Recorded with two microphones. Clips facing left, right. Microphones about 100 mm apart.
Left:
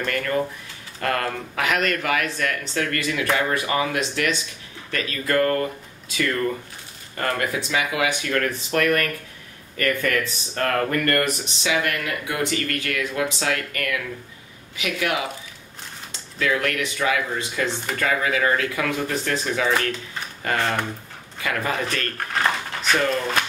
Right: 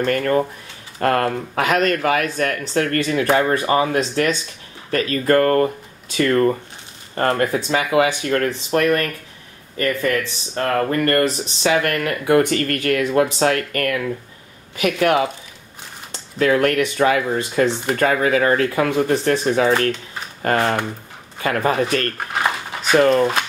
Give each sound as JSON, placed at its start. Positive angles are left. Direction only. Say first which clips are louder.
{"t": 0.0, "sound": "speech", "louder": "right 6 dB", "side_deg": -40}
{"t": 22.1, "sound": "a sound", "louder": "right 2 dB", "side_deg": -10}
{"t": 22.9, "sound": "speech", "louder": "right 10 dB", "side_deg": -45}